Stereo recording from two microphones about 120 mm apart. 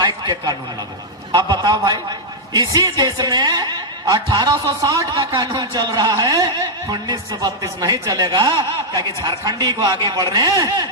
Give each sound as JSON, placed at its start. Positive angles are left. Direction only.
{"t": 0.0, "sound": "a man's voice", "side_deg": -35}